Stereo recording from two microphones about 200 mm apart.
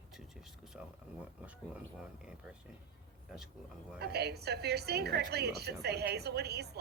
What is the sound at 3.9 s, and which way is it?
A woman's voice, 55° right (ahead or behind).